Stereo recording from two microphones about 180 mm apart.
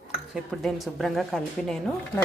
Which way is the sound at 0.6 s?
Centre (ahead or behind).